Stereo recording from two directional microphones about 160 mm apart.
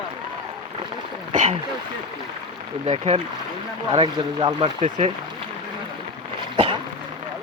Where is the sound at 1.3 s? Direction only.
45° right (ahead or behind).